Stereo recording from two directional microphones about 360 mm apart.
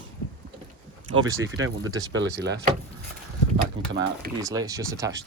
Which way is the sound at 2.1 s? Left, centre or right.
Right.